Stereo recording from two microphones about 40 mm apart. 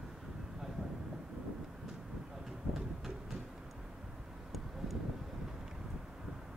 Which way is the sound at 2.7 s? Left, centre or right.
Centre.